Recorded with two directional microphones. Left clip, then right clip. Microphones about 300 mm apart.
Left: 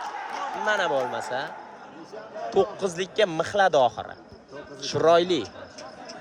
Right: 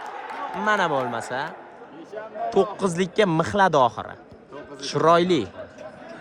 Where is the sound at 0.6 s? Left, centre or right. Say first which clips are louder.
Right 3 dB; centre.